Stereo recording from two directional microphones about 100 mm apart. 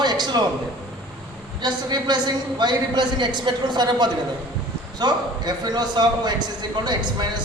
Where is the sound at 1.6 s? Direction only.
45° right (ahead or behind).